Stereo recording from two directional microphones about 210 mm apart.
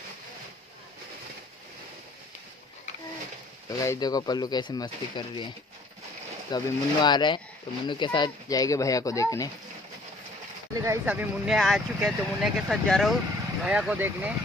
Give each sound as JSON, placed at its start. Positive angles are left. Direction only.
{"t": 3.8, "sound": "speech", "side_deg": 15}
{"t": 6.5, "sound": "speech", "side_deg": 20}
{"t": 10.7, "sound": "speech", "side_deg": -15}